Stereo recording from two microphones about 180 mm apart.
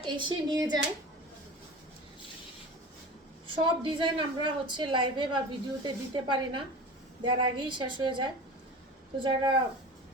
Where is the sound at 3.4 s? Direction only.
30° right (ahead or behind).